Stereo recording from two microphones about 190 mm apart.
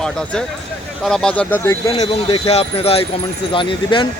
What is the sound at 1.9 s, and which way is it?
Speech, 30° left (ahead or behind).